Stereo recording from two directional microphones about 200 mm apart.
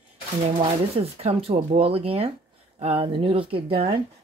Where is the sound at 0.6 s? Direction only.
30° right (ahead or behind).